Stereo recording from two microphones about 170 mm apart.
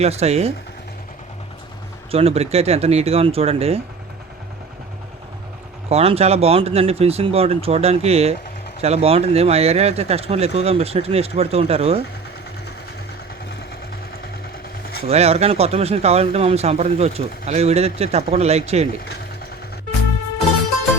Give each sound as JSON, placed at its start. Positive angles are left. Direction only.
{"t": 0.0, "sound": "speech", "side_deg": -40}
{"t": 2.0, "sound": "speech", "side_deg": -35}
{"t": 5.9, "sound": "speech", "side_deg": -35}
{"t": 15.0, "sound": "speech", "side_deg": -40}